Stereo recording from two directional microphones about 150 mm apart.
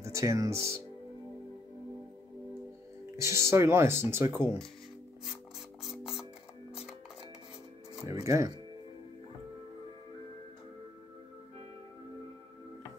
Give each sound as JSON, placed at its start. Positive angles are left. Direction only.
{"t": 0.0, "sound": "speech", "side_deg": -20}
{"t": 3.2, "sound": "speech", "side_deg": -20}
{"t": 5.8, "sound": "music", "side_deg": -5}
{"t": 8.0, "sound": "speech", "side_deg": -20}